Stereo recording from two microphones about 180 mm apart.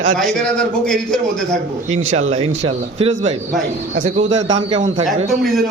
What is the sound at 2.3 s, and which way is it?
A man's voice, 35° right (ahead or behind).